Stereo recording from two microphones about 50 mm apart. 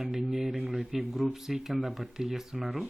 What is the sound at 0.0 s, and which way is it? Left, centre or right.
Speech, centre.